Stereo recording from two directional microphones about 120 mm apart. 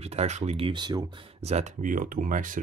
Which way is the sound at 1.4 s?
75° right (ahead or behind).